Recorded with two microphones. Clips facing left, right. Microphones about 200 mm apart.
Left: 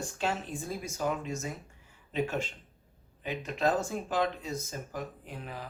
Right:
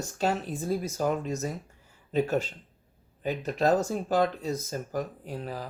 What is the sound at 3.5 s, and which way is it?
Speech, 40° right (ahead or behind).